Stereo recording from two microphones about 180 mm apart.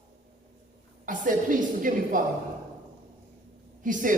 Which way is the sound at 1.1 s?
45° right (ahead or behind).